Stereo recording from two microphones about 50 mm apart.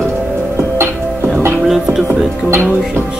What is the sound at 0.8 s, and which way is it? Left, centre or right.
Music, right.